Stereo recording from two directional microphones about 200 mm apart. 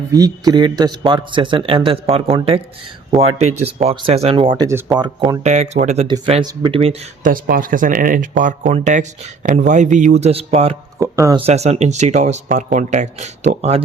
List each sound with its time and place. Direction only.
0.1 s speech: 20° right (ahead or behind)
4.5 s speech: 20° right (ahead or behind)
5.4 s speech: 35° right (ahead or behind)
6.1 s speech: 25° right (ahead or behind)
7.3 s speech: 45° right (ahead or behind); by 10.8 s 30° right (ahead or behind)
11.0 s speech: 15° right (ahead or behind)
11.3 s speech: 30° right (ahead or behind)